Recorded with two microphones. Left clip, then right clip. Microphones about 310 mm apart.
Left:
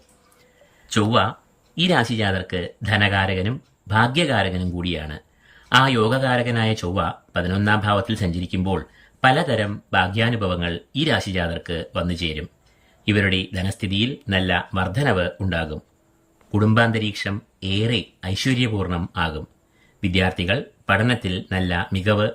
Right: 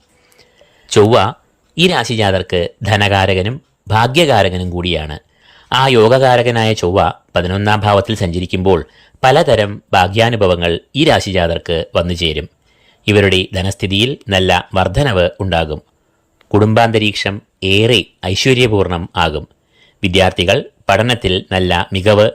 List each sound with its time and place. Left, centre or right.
0.9 s speech: centre